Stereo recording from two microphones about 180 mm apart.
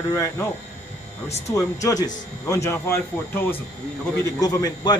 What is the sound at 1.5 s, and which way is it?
Speech, 20° left (ahead or behind).